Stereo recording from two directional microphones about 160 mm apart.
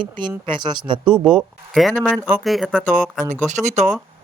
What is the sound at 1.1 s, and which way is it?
Speech, 5° right (ahead or behind).